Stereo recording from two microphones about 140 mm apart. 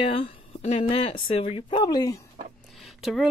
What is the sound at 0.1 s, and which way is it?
Speech, 40° left (ahead or behind).